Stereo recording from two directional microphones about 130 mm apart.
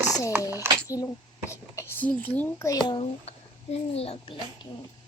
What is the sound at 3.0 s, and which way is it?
A child's voice, 55° left (ahead or behind).